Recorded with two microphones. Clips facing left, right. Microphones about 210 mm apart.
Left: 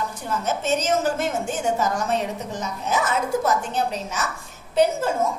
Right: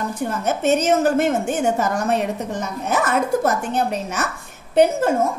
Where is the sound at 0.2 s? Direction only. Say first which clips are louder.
Right 6 dB; 60° right (ahead or behind).